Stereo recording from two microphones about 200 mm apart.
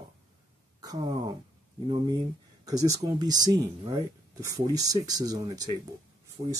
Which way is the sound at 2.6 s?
20° right (ahead or behind).